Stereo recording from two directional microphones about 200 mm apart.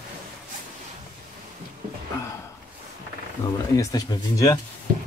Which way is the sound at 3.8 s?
15° left (ahead or behind).